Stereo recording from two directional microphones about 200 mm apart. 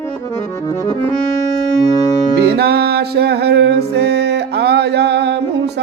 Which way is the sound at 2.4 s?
55° right (ahead or behind).